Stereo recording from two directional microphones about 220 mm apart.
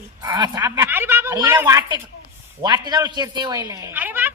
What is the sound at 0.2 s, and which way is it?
A woman's voice, 20° right (ahead or behind).